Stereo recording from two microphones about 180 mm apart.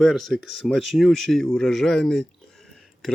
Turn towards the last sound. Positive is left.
turn(degrees=0)  # may be behind; listen again after turning